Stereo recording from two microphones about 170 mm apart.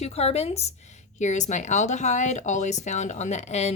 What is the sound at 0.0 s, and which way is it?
Speech, 40° left (ahead or behind).